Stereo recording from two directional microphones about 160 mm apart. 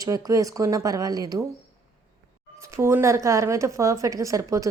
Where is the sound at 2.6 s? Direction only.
15° right (ahead or behind).